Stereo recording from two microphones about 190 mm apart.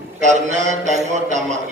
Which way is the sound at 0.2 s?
40° right (ahead or behind).